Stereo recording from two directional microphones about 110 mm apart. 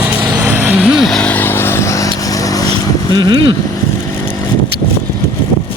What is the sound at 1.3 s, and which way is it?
Vehicle, 20° left (ahead or behind).